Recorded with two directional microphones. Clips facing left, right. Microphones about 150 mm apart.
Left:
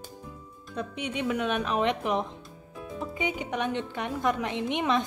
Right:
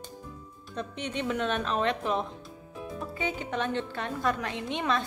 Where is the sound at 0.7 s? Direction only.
10° left (ahead or behind).